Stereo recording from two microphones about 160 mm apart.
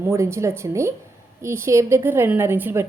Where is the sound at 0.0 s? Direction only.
15° right (ahead or behind).